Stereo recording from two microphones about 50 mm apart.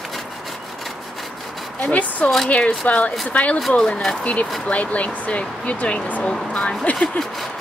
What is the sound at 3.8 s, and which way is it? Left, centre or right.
Speech, centre.